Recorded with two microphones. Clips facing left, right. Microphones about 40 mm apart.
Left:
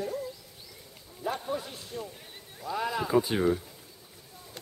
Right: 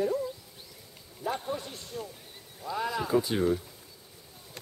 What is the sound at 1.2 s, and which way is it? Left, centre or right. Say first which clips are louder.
Speech: even; centre.